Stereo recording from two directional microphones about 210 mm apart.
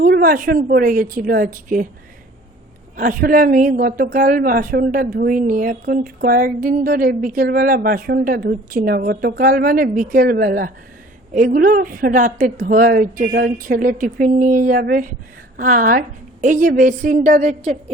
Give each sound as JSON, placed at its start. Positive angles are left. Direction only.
{"t": 0.0, "sound": "a woman's voice", "side_deg": -45}
{"t": 3.0, "sound": "a woman's voice", "side_deg": -40}